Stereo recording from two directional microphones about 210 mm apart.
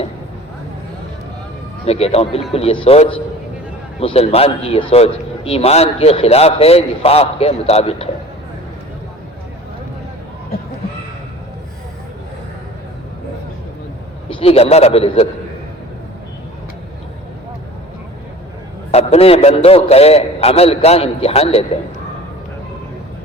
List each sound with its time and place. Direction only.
1.9 s a man's voice: 30° left (ahead or behind)
14.3 s a man's voice: 25° left (ahead or behind)
18.9 s a man's voice: 30° left (ahead or behind)